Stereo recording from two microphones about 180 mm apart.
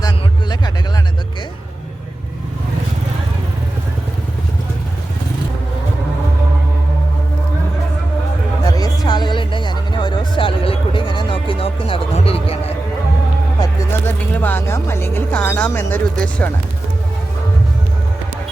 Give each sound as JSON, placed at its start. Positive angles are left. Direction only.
{"t": 8.6, "sound": "music", "side_deg": 20}
{"t": 13.6, "sound": "music", "side_deg": 10}